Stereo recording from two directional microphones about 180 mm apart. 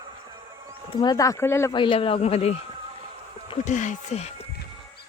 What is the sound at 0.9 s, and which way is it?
Speech, 20° left (ahead or behind).